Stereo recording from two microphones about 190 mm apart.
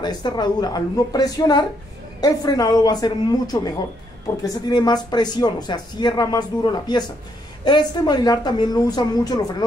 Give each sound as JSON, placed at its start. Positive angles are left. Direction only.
{"t": 0.0, "sound": "speech", "side_deg": 20}